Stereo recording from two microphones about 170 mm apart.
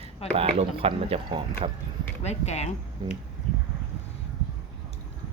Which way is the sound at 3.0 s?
25° right (ahead or behind).